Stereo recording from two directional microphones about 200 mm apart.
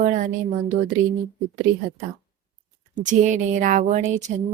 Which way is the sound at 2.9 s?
40° right (ahead or behind).